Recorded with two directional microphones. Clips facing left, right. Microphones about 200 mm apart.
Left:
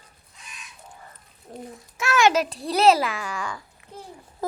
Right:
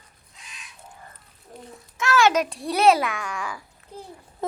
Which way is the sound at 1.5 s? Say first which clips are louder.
Left 5 dB; 25° left (ahead or behind).